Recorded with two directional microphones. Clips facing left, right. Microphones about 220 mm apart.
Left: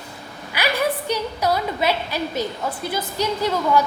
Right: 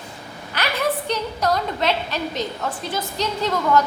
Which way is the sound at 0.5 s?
10° left (ahead or behind).